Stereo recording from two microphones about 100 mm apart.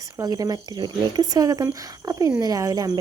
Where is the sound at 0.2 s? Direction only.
40° right (ahead or behind).